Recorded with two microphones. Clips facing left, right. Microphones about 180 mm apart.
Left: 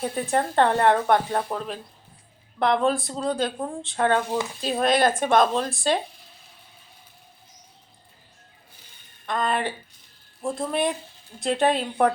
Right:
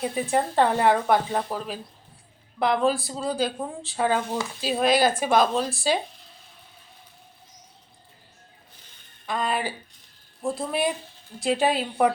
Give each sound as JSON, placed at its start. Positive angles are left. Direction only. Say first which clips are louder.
{"t": 0.0, "sound": "speech", "louder": "even", "side_deg": -5}
{"t": 9.2, "sound": "speech", "louder": "left 2 dB", "side_deg": -5}